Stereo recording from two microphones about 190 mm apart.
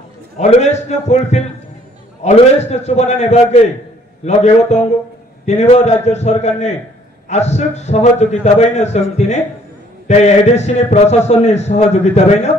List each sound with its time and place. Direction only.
0.4 s a man's voice: 35° left (ahead or behind)